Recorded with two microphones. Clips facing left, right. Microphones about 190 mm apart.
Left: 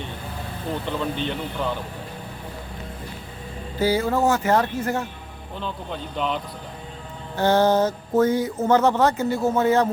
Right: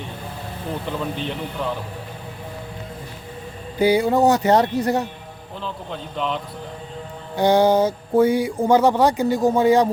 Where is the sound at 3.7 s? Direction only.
15° right (ahead or behind).